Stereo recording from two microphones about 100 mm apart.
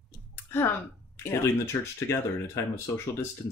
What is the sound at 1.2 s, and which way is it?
Speech, 25° left (ahead or behind).